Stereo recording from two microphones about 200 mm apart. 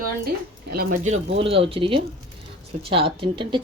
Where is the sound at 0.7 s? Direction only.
50° right (ahead or behind).